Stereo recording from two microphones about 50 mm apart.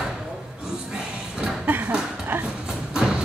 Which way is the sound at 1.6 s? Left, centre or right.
Right.